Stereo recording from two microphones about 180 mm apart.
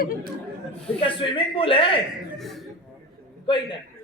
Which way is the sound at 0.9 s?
30° left (ahead or behind).